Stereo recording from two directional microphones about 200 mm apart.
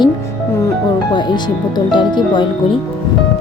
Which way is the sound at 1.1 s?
20° left (ahead or behind).